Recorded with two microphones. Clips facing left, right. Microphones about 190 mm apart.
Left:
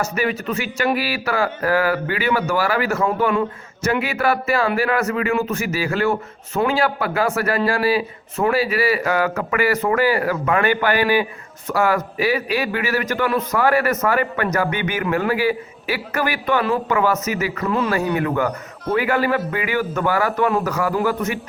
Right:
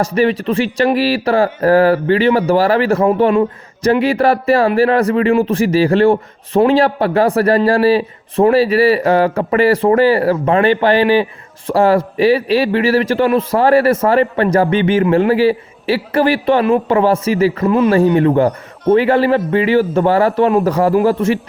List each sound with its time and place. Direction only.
0.0 s a man's voice: 30° right (ahead or behind)